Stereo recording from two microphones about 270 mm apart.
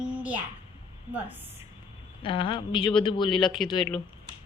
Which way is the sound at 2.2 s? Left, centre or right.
Centre.